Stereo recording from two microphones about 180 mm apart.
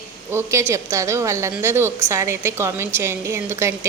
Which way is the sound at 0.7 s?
15° right (ahead or behind).